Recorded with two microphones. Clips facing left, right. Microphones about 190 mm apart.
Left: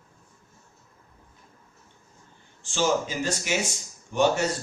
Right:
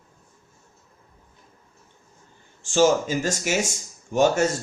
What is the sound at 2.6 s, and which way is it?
A man's voice, 45° right (ahead or behind).